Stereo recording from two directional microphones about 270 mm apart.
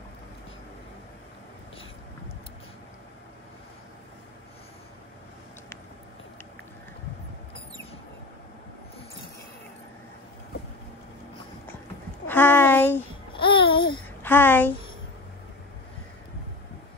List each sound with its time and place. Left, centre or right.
12.3 s a sound: centre
13.3 s babbling: centre
14.2 s speech: centre